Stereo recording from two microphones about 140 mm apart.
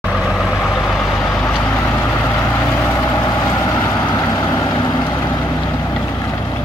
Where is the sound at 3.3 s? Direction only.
25° left (ahead or behind).